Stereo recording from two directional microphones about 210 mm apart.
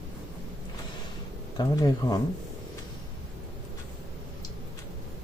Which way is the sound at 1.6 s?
20° left (ahead or behind).